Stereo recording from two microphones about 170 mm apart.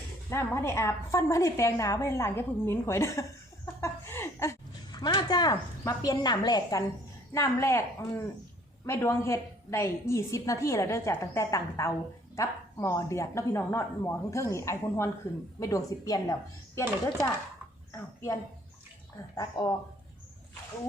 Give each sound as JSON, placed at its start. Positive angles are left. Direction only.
{"t": 0.3, "sound": "a woman's voice", "side_deg": 15}
{"t": 17.9, "sound": "speech", "side_deg": 15}
{"t": 19.4, "sound": "a woman's voice", "side_deg": 25}